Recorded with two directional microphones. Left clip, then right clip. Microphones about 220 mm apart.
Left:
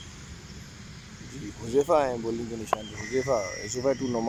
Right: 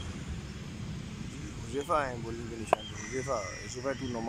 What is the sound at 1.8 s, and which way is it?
Speech, 20° left (ahead or behind).